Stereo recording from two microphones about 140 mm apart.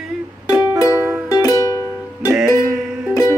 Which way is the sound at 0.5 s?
20° right (ahead or behind).